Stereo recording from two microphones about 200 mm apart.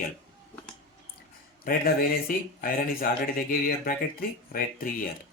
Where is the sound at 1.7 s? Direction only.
45° left (ahead or behind).